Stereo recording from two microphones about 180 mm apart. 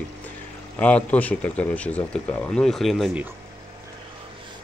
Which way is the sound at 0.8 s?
10° left (ahead or behind).